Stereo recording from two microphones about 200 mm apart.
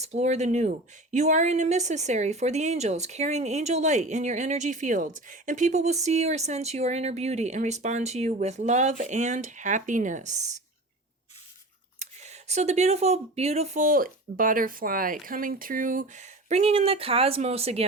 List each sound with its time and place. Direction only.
0.0 s speech: 35° right (ahead or behind)
11.9 s speech: 35° right (ahead or behind)